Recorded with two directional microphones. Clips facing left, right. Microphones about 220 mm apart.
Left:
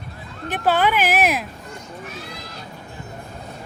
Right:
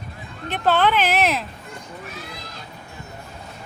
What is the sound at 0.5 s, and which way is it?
Speech, 10° left (ahead or behind).